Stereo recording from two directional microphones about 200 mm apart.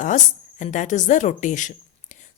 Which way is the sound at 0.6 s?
35° left (ahead or behind).